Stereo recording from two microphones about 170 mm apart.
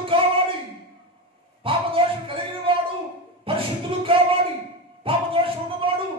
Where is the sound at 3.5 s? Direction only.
35° right (ahead or behind).